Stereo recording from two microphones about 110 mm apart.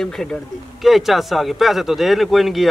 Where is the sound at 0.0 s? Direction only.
5° left (ahead or behind).